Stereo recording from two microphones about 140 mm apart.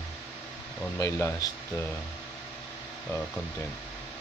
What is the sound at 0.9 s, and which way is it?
Speech, 20° left (ahead or behind).